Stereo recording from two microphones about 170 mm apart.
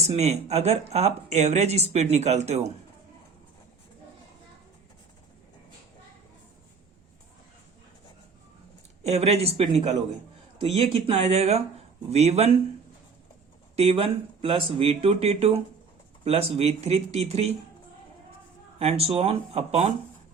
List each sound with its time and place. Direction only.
0.0 s speech: 40° right (ahead or behind)
9.0 s speech: 40° right (ahead or behind)
13.7 s speech: 35° right (ahead or behind)
18.8 s speech: 35° right (ahead or behind)